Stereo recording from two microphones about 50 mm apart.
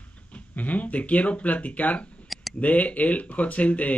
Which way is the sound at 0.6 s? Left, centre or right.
Left.